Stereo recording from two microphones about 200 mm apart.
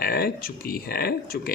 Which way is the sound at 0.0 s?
50° left (ahead or behind).